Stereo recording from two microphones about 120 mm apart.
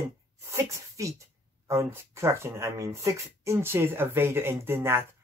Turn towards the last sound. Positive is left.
turn(degrees=-20)  # may be behind; listen again after turning